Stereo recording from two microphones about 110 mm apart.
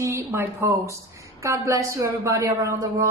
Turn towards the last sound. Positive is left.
turn(degrees=-30)  # may be behind; listen again after turning